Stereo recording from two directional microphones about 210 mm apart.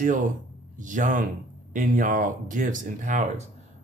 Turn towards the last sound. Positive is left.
turn(degrees=-35)  # may be behind; listen again after turning